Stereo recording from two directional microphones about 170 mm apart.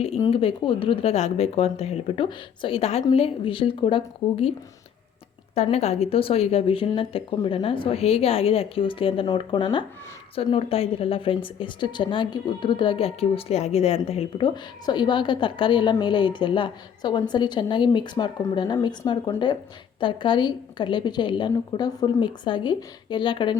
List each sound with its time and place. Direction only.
0.3 s speech: 35° left (ahead or behind)
5.5 s a woman's voice: 40° left (ahead or behind)